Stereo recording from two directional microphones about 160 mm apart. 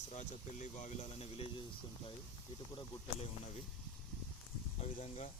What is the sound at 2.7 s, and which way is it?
Speech, 40° left (ahead or behind).